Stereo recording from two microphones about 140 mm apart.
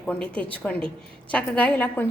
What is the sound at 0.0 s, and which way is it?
A woman's voice, 5° left (ahead or behind).